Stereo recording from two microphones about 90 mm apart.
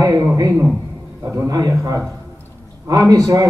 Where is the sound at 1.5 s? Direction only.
40° right (ahead or behind).